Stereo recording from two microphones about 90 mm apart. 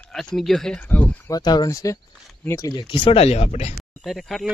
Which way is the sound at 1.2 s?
45° left (ahead or behind).